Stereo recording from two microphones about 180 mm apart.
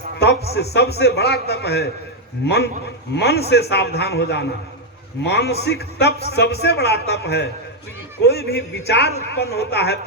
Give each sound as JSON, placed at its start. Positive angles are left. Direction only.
{"t": 0.2, "sound": "a man's voice", "side_deg": 65}
{"t": 3.2, "sound": "a man's voice", "side_deg": 65}